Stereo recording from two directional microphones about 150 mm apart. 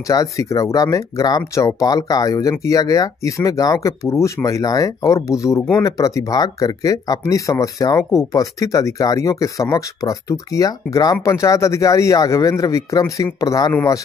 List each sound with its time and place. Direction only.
0.0 s speech: 20° left (ahead or behind)